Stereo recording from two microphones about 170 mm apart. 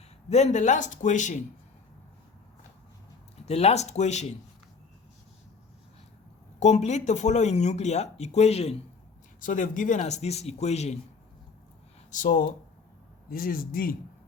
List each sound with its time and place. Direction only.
0.3 s speech: 40° left (ahead or behind)
3.4 s speech: 40° left (ahead or behind)
6.6 s speech: 45° left (ahead or behind)
9.4 s speech: 50° left (ahead or behind)
12.1 s a man's voice: 50° left (ahead or behind)